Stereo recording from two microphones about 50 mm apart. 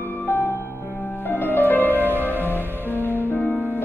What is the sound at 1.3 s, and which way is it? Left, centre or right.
Music, left.